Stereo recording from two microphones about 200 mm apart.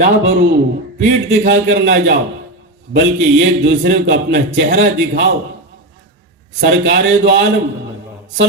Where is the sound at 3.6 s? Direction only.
70° right (ahead or behind).